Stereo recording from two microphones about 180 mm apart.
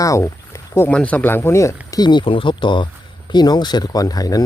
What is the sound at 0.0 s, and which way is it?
Speech, 15° left (ahead or behind).